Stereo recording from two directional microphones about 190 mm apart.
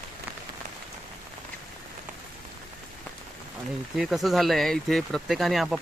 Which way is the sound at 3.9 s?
Centre (ahead or behind).